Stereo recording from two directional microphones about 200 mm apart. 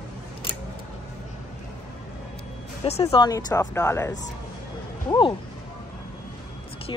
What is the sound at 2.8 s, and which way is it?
Speech, 30° left (ahead or behind).